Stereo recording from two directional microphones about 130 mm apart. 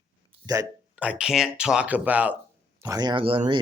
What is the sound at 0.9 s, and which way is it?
Speech, 10° right (ahead or behind).